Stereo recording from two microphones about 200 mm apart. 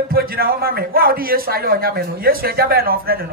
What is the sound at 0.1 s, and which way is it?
A man's voice, 50° right (ahead or behind).